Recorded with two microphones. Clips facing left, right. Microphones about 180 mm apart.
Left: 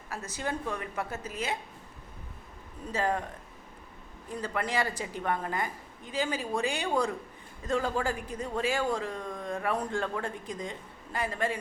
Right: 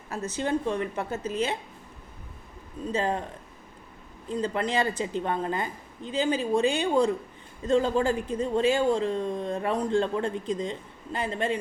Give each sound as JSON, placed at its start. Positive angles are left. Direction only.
{"t": 0.1, "sound": "speech", "side_deg": -25}
{"t": 2.9, "sound": "speech", "side_deg": -25}
{"t": 4.3, "sound": "speech", "side_deg": -25}